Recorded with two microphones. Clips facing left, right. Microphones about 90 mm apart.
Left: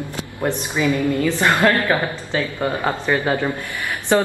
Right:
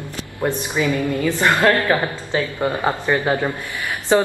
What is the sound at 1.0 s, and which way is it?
Speech, 20° right (ahead or behind).